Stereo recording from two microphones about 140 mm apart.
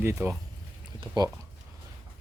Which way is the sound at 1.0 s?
30° right (ahead or behind).